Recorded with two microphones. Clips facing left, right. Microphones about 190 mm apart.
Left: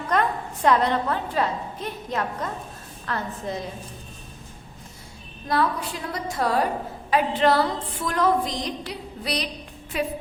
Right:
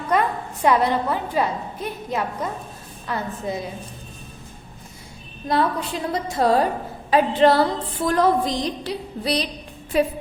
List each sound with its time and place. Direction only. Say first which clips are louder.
0.1 s a woman's voice: right 2 dB; 5° right (ahead or behind)
5.5 s a woman's voice: right 3 dB; 25° right (ahead or behind)